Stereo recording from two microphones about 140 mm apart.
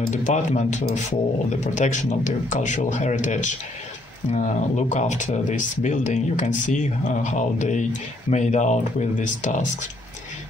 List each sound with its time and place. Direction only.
0.1 s speech: 60° left (ahead or behind)